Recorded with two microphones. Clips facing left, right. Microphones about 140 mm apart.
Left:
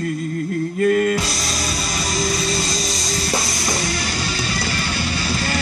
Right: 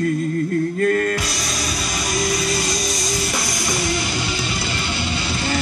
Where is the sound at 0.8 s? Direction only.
5° left (ahead or behind).